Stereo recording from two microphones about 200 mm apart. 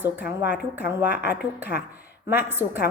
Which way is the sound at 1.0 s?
55° left (ahead or behind).